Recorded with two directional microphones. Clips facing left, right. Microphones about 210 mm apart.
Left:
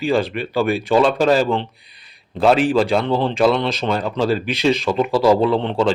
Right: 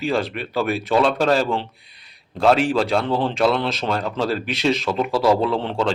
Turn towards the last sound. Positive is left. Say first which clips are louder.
# left 4 dB
turn(degrees=0)  # may be behind; listen again after turning